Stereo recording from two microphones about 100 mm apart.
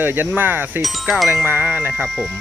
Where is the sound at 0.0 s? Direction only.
20° right (ahead or behind).